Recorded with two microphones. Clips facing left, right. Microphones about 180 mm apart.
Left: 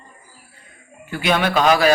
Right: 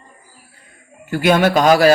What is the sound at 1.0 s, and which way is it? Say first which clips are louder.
Speech: right 6 dB; 45° right (ahead or behind).